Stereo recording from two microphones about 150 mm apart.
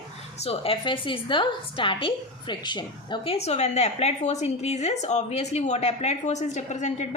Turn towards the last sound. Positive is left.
turn(degrees=50)  # may be behind; listen again after turning